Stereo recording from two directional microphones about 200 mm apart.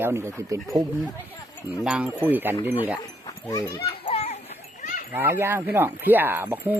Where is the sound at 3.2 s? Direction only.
15° left (ahead or behind).